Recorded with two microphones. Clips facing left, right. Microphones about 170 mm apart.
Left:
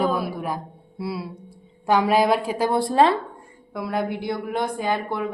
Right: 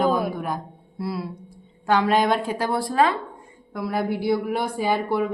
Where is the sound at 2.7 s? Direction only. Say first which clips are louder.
Left 3 dB; 25° left (ahead or behind).